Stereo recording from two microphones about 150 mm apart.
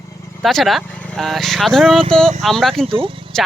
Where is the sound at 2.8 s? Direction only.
35° right (ahead or behind).